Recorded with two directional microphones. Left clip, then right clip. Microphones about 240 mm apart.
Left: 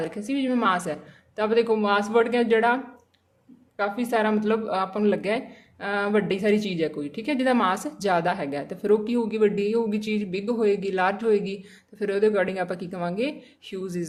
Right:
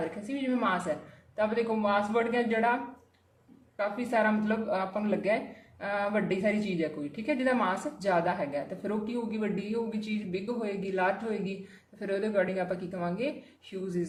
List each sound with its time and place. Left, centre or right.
0.3 s speech: left
3.8 s speech: left